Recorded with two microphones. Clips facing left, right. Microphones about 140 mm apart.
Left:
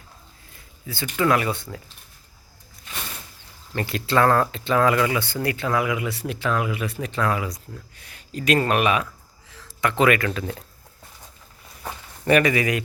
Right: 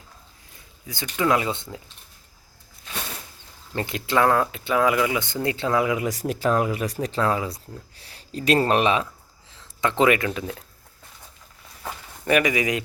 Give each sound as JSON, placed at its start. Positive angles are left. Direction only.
{"t": 1.2, "sound": "speech", "side_deg": -20}
{"t": 3.7, "sound": "speech", "side_deg": -20}
{"t": 12.2, "sound": "speech", "side_deg": -10}